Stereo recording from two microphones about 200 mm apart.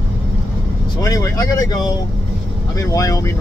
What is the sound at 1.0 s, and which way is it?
Speech, 15° left (ahead or behind).